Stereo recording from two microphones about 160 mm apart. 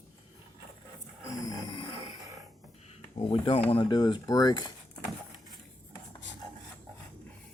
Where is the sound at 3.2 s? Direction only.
35° left (ahead or behind).